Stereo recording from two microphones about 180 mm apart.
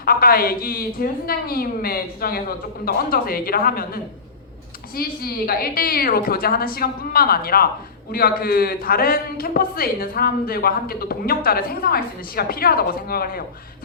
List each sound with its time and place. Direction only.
0.0 s a man's voice: 55° left (ahead or behind)